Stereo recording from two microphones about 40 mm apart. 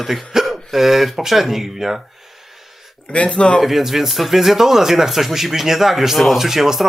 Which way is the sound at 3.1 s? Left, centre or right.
Left.